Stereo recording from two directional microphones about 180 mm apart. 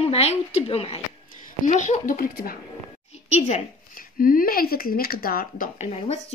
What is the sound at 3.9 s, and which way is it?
A woman's voice, 50° left (ahead or behind).